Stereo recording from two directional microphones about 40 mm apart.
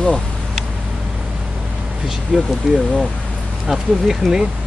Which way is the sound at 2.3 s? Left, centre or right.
Centre.